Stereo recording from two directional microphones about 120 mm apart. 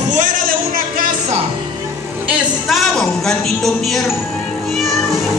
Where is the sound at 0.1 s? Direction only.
90° right.